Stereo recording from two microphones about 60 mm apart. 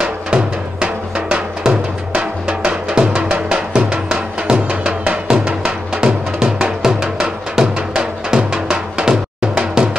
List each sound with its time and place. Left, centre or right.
0.0 s drum: right
2.1 s music: centre